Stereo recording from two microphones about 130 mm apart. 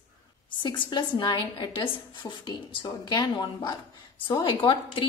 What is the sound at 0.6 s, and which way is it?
A woman's voice, 35° left (ahead or behind).